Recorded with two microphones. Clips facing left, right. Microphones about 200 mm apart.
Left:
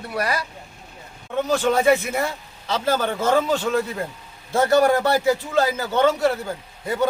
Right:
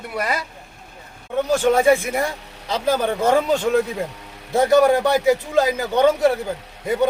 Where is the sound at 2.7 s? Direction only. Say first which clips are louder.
Right 2 dB; 15° right (ahead or behind).